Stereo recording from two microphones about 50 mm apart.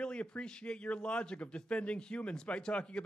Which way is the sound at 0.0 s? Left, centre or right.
Left.